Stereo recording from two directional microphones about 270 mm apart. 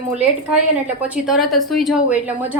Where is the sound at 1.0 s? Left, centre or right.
Centre.